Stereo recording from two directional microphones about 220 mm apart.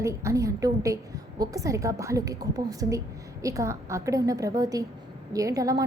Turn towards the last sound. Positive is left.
turn(degrees=-15)  # may be behind; listen again after turning